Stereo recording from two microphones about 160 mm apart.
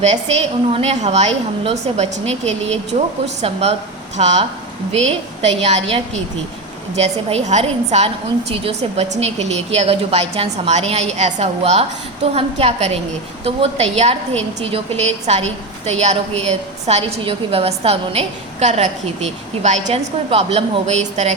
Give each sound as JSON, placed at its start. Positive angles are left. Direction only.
{"t": 0.0, "sound": "a woman's voice", "side_deg": -45}